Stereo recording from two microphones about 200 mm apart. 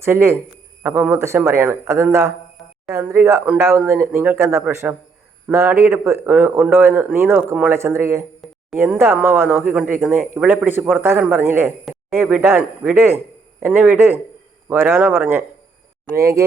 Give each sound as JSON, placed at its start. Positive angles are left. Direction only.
{"t": 0.0, "sound": "speech", "side_deg": -15}